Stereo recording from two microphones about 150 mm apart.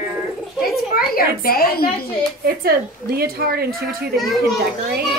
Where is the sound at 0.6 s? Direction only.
80° left.